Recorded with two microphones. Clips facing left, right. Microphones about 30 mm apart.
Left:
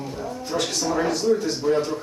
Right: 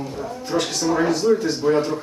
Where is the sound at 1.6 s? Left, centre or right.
Centre.